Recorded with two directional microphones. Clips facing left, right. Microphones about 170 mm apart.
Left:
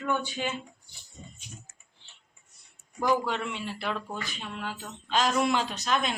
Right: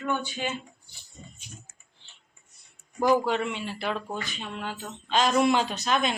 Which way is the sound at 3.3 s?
Centre (ahead or behind).